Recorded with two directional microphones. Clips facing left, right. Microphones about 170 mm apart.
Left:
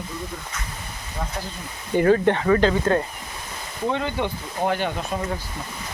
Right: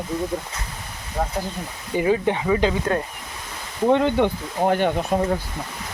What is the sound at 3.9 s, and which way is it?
Speech, 60° right (ahead or behind).